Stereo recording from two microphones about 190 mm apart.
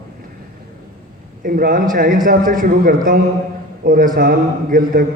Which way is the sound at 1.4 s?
45° right (ahead or behind).